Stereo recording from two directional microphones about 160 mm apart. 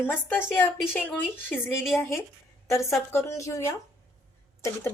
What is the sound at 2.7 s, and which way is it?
A woman's voice, 20° left (ahead or behind).